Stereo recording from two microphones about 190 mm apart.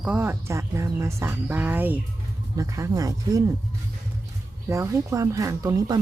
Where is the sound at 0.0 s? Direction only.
10° right (ahead or behind).